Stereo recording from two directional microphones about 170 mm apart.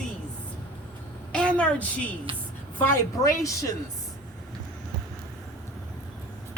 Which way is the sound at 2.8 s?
20° left (ahead or behind).